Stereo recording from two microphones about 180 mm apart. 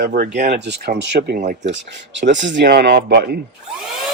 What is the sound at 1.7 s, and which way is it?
Speech, 85° right.